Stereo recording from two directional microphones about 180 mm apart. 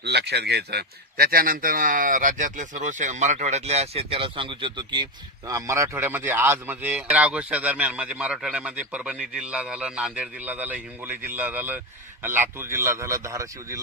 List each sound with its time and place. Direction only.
0.0 s a man's voice: 65° right (ahead or behind); by 13.7 s 15° right (ahead or behind)